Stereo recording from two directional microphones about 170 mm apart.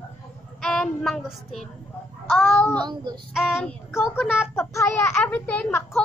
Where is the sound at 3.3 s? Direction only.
5° right (ahead or behind).